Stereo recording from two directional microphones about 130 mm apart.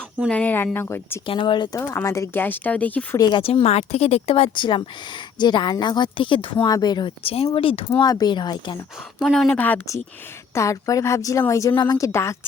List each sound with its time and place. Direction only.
0.3 s speech: 10° left (ahead or behind)
1.3 s a woman's voice: 40° left (ahead or behind)
1.8 s speech: 20° left (ahead or behind)
3.2 s a woman's voice: 30° left (ahead or behind)
3.4 s a woman's voice: 50° left (ahead or behind)
7.9 s a woman's voice: 30° left (ahead or behind)
9.1 s speech: centre (ahead or behind)
9.5 s speech: 15° left (ahead or behind)
11.7 s a woman's voice: 35° left (ahead or behind)
11.9 s speech: 25° left (ahead or behind)